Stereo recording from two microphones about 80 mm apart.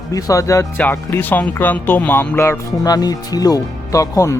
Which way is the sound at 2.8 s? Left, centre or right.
Left.